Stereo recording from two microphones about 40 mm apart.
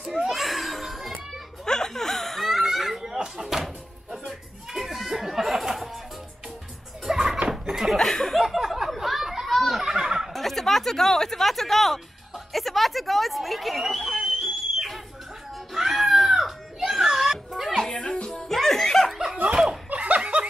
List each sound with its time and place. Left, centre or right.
0.3 s children playing: centre
1.7 s laughter: centre
3.3 s music: centre
7.1 s a sound: centre
8.0 s a sound: centre
9.6 s snicker: centre
10.3 s a sound: centre
15.7 s a sound: centre
17.5 s music: centre
18.0 s music: centre
18.5 s music: centre
19.3 s snicker: right